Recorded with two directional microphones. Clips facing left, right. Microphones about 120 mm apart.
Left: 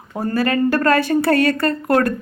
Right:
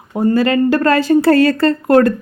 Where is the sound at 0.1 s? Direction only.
20° right (ahead or behind).